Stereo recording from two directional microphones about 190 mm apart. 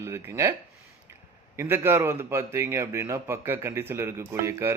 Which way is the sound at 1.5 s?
10° right (ahead or behind).